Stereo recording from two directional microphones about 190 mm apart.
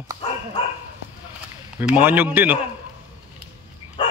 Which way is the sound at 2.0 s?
10° right (ahead or behind).